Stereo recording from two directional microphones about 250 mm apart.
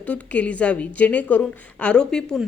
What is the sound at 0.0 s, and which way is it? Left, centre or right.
A woman's voice, centre.